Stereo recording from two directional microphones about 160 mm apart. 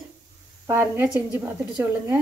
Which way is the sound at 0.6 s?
15° right (ahead or behind).